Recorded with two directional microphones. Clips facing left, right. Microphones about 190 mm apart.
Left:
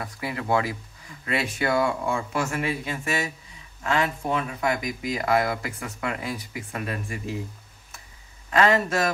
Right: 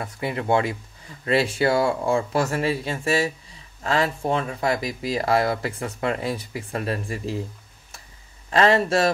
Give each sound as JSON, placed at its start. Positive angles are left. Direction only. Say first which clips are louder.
{"t": 0.0, "sound": "speech", "louder": "right 4 dB", "side_deg": -25}
{"t": 8.5, "sound": "speech", "louder": "right 2 dB", "side_deg": -30}